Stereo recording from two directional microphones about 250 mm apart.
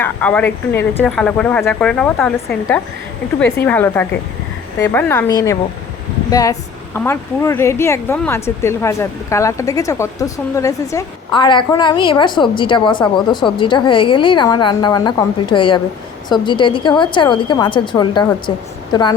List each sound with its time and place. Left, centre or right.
0.0 s a woman's voice: centre